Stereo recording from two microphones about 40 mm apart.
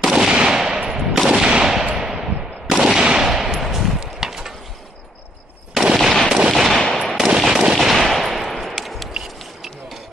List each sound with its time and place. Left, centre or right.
0.1 s gunshot: centre
3.0 s gunshot: right
3.3 s gunshot: centre
3.8 s a sound: centre
5.9 s gunshot: centre
6.5 s machine gun: centre
6.8 s machine gun: centre
7.2 s machine gun: centre
7.7 s gunshot: centre
9.1 s a sound: centre